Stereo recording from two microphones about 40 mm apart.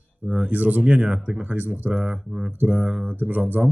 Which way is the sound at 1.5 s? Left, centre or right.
Right.